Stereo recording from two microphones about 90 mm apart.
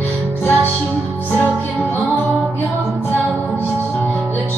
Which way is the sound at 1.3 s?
20° left (ahead or behind).